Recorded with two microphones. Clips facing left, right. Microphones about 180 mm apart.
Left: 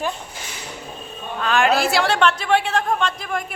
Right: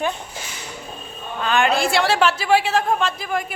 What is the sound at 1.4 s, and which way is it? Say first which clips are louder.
A woman's voice: left 1 dB; centre (ahead or behind).